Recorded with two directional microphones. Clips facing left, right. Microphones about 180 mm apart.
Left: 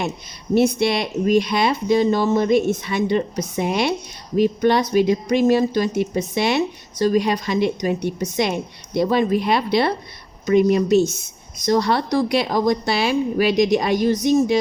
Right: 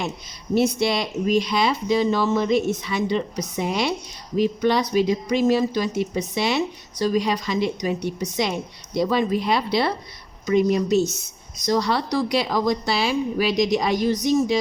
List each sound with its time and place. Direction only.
0.5 s speech: 55° left (ahead or behind)